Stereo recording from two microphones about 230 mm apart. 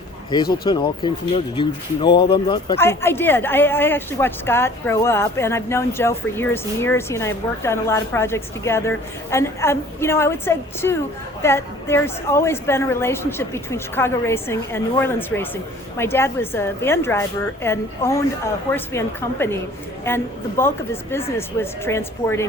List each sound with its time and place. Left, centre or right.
0.5 s speech: centre
2.7 s speech: centre